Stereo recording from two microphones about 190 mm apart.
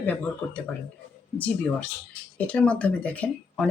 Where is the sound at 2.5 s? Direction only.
5° left (ahead or behind).